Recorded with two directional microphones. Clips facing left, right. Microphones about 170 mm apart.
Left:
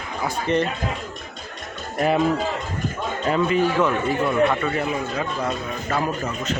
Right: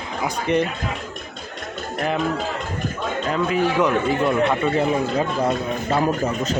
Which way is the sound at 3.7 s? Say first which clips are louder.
Right 2 dB; 15° right (ahead or behind).